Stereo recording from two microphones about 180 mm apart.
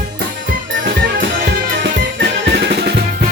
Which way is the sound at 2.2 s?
65° right (ahead or behind).